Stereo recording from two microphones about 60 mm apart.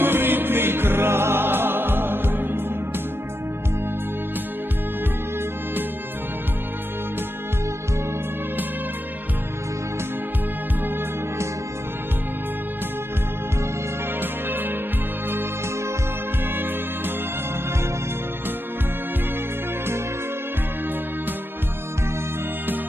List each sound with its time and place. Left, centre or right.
0.0 s music: right